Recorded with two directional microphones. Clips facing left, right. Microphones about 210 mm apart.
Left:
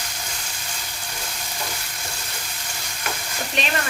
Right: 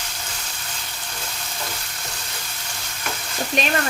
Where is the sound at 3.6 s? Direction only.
45° right (ahead or behind).